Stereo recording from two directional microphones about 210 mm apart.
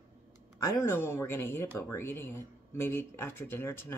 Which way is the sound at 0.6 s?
10° left (ahead or behind).